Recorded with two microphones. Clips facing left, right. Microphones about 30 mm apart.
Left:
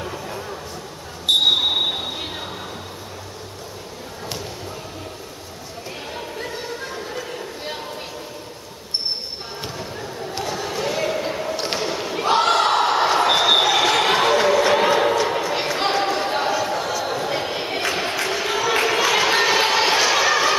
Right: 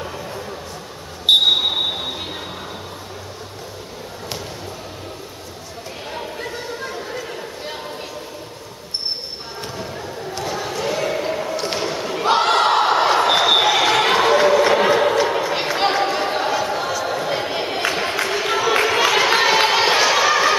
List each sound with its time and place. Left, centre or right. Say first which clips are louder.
1.4 s a sound: right 1 dB; centre
6.1 s chatter: right 2 dB; centre
10.4 s basketball bounce: right 1 dB; centre
11.5 s basketball bounce: right 2 dB; centre
11.8 s basketball bounce: right 2 dB; centre
16.6 s a sound: right 1 dB; centre